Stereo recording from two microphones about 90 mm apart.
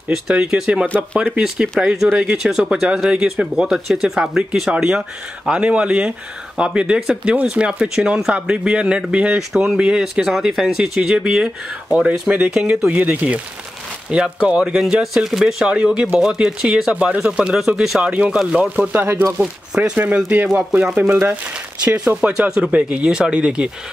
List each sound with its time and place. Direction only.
0.1 s a man's voice: 10° right (ahead or behind)
0.8 s speech: 15° left (ahead or behind)
1.4 s a man's voice: 10° right (ahead or behind)
18.8 s a man's voice: 20° right (ahead or behind)